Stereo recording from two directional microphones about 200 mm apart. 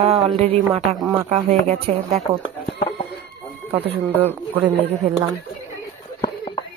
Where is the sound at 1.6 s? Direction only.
30° right (ahead or behind).